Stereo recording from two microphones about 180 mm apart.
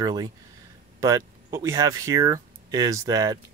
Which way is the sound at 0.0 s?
20° right (ahead or behind).